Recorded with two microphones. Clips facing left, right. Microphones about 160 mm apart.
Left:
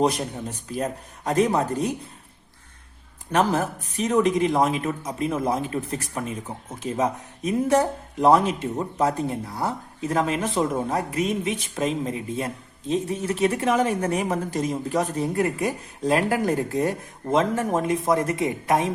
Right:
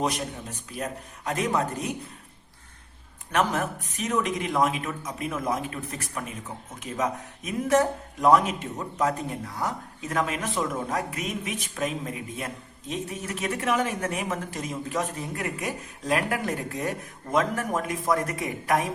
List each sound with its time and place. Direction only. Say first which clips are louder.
0.7 s speech: left 5 dB; 35° left (ahead or behind)
3.3 s speech: left 4 dB; 30° left (ahead or behind)